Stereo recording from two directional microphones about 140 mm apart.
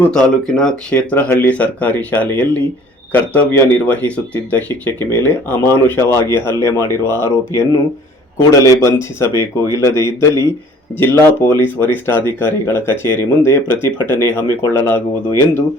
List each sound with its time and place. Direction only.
0.0 s speech: 5° left (ahead or behind); by 15.4 s 20° left (ahead or behind)